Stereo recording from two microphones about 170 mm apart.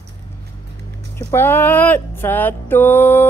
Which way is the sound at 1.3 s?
10° left (ahead or behind).